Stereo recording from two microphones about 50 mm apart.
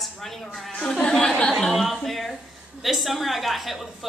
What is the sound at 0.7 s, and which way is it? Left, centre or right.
Speech, centre.